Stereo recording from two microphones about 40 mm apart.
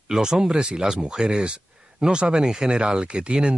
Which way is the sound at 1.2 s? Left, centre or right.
Right.